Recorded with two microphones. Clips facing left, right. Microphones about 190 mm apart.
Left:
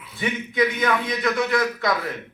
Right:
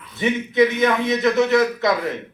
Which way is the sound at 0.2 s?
25° right (ahead or behind).